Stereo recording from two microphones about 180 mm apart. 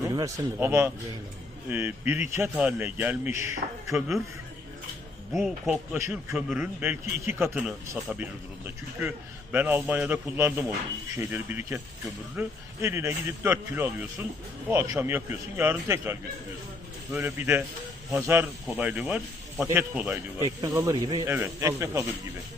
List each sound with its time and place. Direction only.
0.0 s a man's voice: 20° right (ahead or behind)
5.3 s speech: centre (ahead or behind)
6.0 s a man's voice: 15° right (ahead or behind)